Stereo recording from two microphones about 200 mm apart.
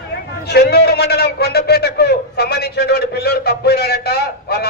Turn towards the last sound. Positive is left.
turn(degrees=50)  # may be behind; listen again after turning